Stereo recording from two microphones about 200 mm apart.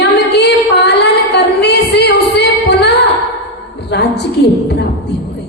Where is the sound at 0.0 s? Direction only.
60° left (ahead or behind).